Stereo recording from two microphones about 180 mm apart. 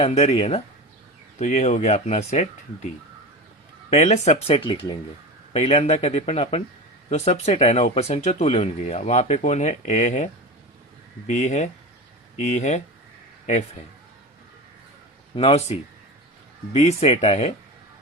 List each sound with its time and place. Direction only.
0.0 s speech: 35° left (ahead or behind)
3.8 s speech: 40° left (ahead or behind)
11.3 s speech: 40° left (ahead or behind)
15.4 s speech: 35° left (ahead or behind)